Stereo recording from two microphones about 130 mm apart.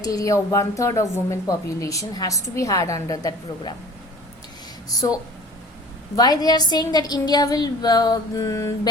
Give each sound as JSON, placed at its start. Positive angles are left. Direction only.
{"t": 0.0, "sound": "a woman's voice", "side_deg": 25}
{"t": 4.9, "sound": "a woman's voice", "side_deg": 25}